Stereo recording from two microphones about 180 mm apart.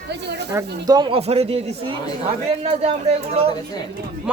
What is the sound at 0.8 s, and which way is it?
Speech, 25° right (ahead or behind).